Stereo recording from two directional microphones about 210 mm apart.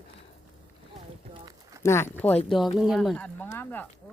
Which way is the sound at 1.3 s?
20° right (ahead or behind).